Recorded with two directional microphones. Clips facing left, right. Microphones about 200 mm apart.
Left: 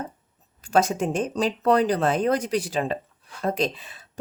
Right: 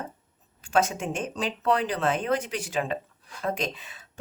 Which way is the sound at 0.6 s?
35° left (ahead or behind).